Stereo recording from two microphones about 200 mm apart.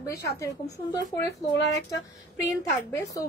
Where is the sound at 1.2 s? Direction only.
60° left (ahead or behind).